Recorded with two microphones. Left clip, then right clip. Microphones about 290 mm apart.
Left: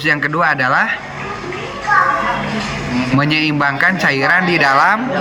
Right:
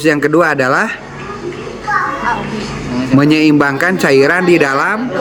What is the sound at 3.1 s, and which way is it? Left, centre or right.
A man's voice, centre.